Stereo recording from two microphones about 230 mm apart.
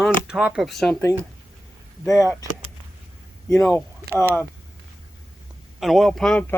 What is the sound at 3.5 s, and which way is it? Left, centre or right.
Speech, centre.